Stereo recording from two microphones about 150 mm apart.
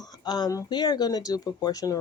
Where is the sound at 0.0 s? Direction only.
25° left (ahead or behind).